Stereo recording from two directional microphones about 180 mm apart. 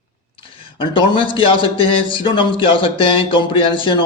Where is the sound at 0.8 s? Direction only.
30° left (ahead or behind).